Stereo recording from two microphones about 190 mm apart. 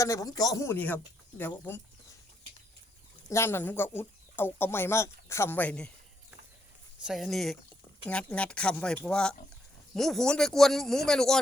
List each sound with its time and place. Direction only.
0.0 s speech: 15° left (ahead or behind)
3.2 s speech: 15° left (ahead or behind)
7.0 s a man's voice: centre (ahead or behind)